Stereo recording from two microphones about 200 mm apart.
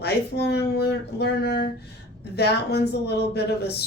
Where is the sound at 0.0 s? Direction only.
55° left (ahead or behind).